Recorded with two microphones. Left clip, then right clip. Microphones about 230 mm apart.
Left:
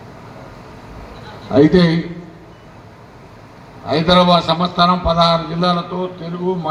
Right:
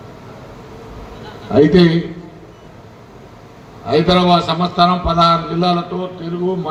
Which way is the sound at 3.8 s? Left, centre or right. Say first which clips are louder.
Even; right.